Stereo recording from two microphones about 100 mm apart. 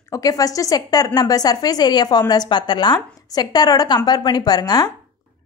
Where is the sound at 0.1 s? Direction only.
35° left (ahead or behind).